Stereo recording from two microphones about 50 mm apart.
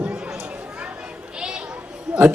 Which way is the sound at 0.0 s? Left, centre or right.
Centre.